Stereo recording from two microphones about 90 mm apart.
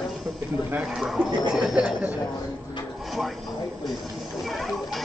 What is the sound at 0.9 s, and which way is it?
Speech, 5° right (ahead or behind).